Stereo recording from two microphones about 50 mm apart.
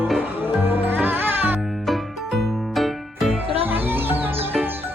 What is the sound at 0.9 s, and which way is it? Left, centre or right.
Music, right.